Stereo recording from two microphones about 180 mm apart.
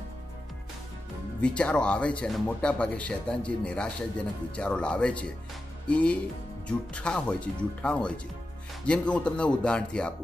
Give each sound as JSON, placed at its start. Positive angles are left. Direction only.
{"t": 1.4, "sound": "speech", "side_deg": 5}